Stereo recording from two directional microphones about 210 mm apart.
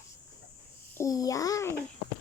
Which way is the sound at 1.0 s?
15° left (ahead or behind).